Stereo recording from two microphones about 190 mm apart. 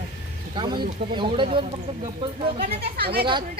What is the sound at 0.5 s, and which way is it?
Speech, 25° right (ahead or behind).